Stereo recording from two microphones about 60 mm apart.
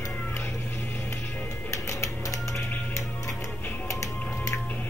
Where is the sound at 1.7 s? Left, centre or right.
Left.